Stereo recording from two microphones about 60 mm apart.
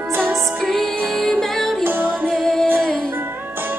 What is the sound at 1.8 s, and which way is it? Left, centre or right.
Music, right.